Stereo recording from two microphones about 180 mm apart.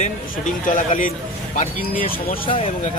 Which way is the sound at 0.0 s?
45° left (ahead or behind).